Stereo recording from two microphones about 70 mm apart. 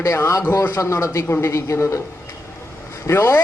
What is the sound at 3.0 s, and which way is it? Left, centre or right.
Speech, left.